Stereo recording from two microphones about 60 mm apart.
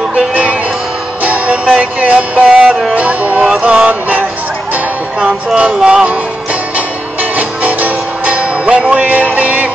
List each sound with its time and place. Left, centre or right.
0.1 s music: right
5.8 s speech: centre
7.3 s music: right